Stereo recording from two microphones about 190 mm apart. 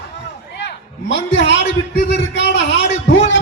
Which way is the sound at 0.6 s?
65° left (ahead or behind).